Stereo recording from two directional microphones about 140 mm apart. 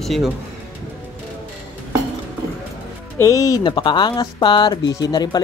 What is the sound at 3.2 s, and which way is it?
Speech, 25° left (ahead or behind).